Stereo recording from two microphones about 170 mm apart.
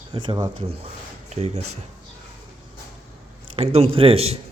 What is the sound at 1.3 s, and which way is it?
Speech, 40° right (ahead or behind).